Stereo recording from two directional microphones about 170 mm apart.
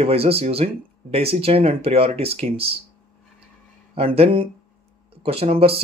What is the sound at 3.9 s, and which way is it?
Speech, 35° right (ahead or behind).